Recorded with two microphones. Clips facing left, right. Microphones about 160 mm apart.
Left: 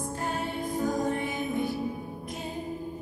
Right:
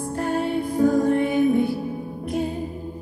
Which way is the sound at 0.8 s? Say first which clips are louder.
Right 11 dB; 65° right (ahead or behind).